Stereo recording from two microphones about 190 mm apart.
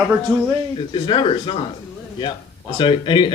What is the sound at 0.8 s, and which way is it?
Speech, 25° left (ahead or behind).